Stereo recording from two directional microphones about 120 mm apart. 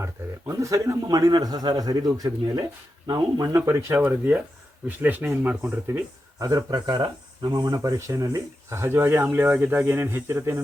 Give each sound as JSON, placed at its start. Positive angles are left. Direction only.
{"t": 0.0, "sound": "a man's voice", "side_deg": -25}
{"t": 6.4, "sound": "speech", "side_deg": -30}